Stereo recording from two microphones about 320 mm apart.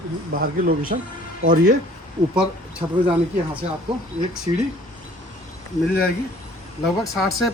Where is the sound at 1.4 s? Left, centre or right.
Right.